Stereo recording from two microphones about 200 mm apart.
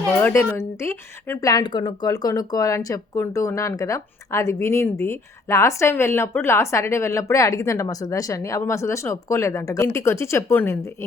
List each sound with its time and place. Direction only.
0.2 s speech: 10° left (ahead or behind)